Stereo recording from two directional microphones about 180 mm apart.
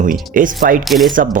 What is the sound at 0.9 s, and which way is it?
Speech, centre (ahead or behind).